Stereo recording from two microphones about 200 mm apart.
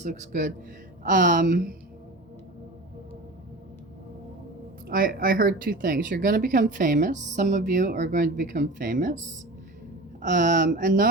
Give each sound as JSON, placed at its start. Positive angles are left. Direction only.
{"t": 0.0, "sound": "speech", "side_deg": -40}
{"t": 4.9, "sound": "speech", "side_deg": -45}